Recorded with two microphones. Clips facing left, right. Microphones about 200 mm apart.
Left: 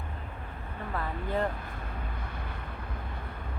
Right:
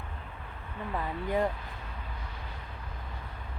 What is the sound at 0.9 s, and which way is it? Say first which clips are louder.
Speech: right 1 dB; 15° right (ahead or behind).